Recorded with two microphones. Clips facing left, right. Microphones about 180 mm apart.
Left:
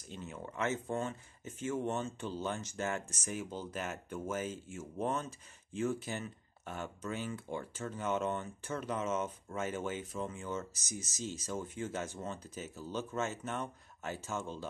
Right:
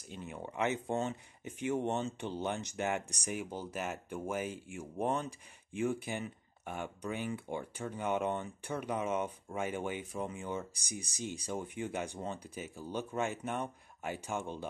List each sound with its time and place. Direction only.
0.1 s speech: 10° right (ahead or behind)